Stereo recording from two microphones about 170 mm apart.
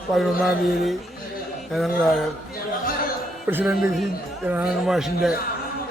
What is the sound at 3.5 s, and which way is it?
Speech, 15° right (ahead or behind).